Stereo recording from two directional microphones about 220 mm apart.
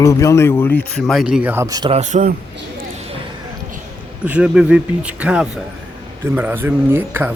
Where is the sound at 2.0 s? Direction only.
35° right (ahead or behind).